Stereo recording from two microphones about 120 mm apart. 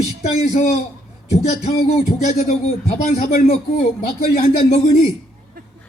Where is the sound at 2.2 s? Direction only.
75° left (ahead or behind).